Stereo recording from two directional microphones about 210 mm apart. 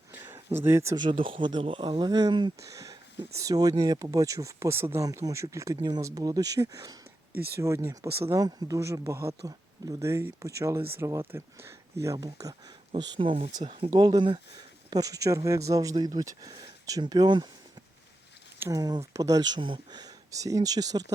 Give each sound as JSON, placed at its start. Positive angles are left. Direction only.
{"t": 0.1, "sound": "speech", "side_deg": -10}
{"t": 18.6, "sound": "speech", "side_deg": -15}